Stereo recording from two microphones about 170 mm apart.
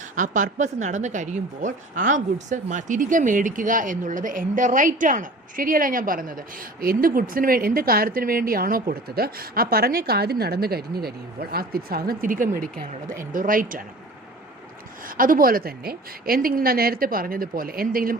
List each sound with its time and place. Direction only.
0.2 s a woman's voice: 50° right (ahead or behind)
15.0 s a woman's voice: 55° right (ahead or behind)